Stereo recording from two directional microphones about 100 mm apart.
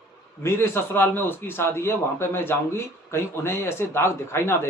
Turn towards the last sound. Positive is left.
turn(degrees=25)  # may be behind; listen again after turning